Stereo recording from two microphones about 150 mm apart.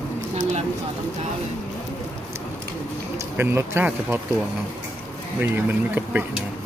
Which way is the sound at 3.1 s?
15° right (ahead or behind).